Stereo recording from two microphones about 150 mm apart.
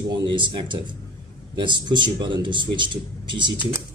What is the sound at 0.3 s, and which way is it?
Speech, 35° right (ahead or behind).